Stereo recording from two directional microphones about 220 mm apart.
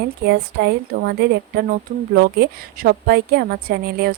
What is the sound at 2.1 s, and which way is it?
A woman's voice, 45° right (ahead or behind).